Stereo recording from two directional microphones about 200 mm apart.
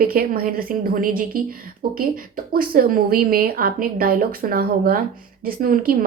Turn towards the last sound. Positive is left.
turn(degrees=-45)  # may be behind; listen again after turning